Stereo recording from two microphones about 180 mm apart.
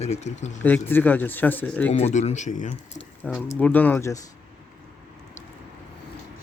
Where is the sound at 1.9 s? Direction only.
35° left (ahead or behind).